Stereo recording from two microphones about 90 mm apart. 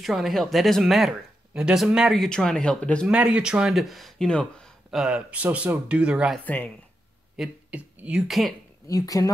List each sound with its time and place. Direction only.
0.0 s speech: centre (ahead or behind)
3.1 s speech: 10° right (ahead or behind); by 4.6 s 10° left (ahead or behind)
4.9 s speech: 10° right (ahead or behind)
6.4 s speech: 20° left (ahead or behind)
7.3 s speech: 10° right (ahead or behind)
8.8 s speech: 40° left (ahead or behind)